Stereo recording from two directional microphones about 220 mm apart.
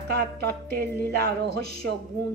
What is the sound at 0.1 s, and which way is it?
A woman's voice, 45° right (ahead or behind).